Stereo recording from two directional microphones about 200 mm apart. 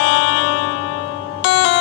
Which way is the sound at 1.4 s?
70° left (ahead or behind).